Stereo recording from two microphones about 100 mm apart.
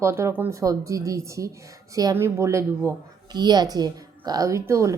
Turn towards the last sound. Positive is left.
turn(degrees=-30)  # may be behind; listen again after turning